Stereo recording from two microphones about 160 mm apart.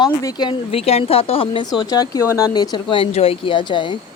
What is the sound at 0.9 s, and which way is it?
Speech, 40° left (ahead or behind).